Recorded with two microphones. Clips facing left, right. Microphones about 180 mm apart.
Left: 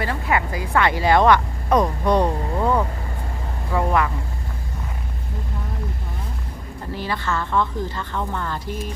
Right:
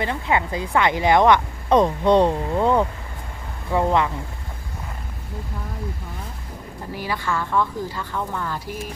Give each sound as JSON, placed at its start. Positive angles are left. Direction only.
{"t": 0.0, "sound": "speech", "side_deg": -20}
{"t": 6.9, "sound": "speech", "side_deg": -10}